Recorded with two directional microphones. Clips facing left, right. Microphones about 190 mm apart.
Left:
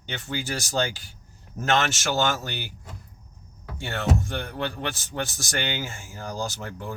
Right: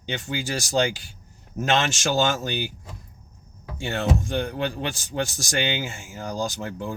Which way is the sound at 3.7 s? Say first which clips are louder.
Right 2 dB; 15° right (ahead or behind).